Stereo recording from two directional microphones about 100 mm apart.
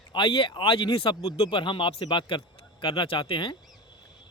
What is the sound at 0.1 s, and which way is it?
Speech, 55° left (ahead or behind).